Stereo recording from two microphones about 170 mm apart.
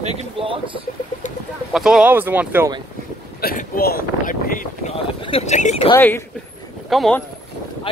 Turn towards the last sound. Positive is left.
turn(degrees=0)  # may be behind; listen again after turning